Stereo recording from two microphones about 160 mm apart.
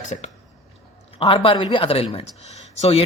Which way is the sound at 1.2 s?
35° left (ahead or behind).